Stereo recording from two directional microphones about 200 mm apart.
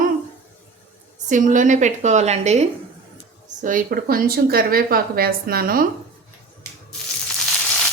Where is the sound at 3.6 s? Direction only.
45° right (ahead or behind).